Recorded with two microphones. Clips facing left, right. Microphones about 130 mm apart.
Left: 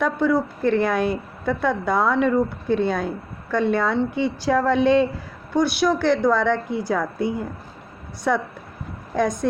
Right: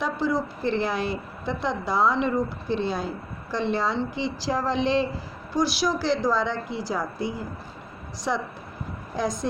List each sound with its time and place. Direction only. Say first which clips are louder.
0.0 s a woman's voice: left 5 dB; 55° left (ahead or behind)
9.1 s a woman's voice: left 6 dB; 55° left (ahead or behind)